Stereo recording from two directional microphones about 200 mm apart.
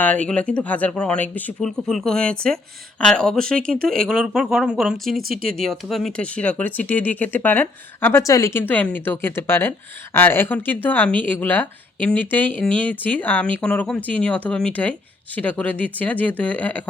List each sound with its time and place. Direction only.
0.0 s speech: 5° left (ahead or behind)
5.3 s speech: 45° right (ahead or behind)
5.5 s speech: centre (ahead or behind)